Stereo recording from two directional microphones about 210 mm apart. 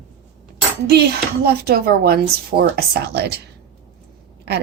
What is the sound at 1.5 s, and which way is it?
A woman's voice, 50° right (ahead or behind).